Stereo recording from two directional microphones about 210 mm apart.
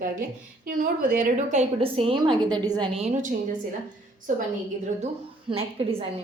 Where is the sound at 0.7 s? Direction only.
40° right (ahead or behind).